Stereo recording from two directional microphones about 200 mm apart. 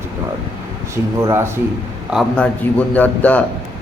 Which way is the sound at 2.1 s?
Centre (ahead or behind).